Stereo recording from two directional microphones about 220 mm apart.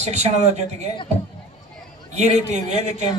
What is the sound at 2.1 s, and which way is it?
Speech, 30° right (ahead or behind).